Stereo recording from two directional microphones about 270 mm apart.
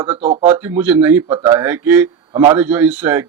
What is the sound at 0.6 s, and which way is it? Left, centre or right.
Speech, centre.